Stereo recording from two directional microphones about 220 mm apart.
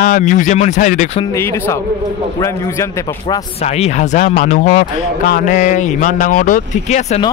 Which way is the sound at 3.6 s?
30° left (ahead or behind).